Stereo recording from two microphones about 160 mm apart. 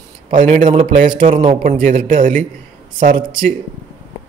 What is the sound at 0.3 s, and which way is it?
A man's voice, 55° right (ahead or behind).